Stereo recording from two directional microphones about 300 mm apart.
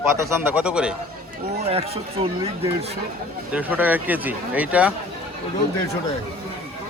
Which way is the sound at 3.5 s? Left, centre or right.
Centre.